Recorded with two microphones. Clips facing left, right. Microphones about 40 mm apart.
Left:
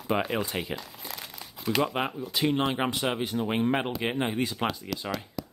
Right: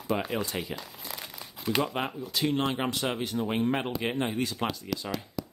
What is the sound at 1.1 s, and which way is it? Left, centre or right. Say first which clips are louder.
Crumpling: even; centre.